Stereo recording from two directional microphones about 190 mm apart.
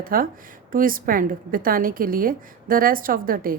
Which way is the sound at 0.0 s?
50° right (ahead or behind).